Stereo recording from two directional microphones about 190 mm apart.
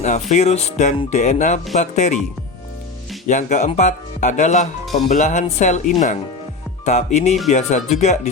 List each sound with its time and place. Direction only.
0.0 s speech: 40° left (ahead or behind)
3.2 s speech: 40° left (ahead or behind)